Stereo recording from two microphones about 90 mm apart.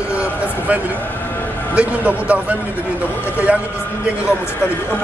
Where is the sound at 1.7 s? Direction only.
15° right (ahead or behind).